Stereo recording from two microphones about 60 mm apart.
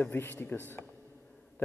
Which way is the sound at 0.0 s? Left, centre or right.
Left.